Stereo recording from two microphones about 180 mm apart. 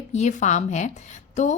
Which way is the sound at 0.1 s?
40° left (ahead or behind).